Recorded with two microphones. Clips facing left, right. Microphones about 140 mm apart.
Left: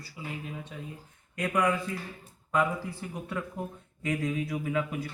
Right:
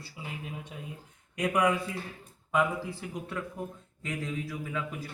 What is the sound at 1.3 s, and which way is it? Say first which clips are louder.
Speech: right 1 dB; 15° right (ahead or behind).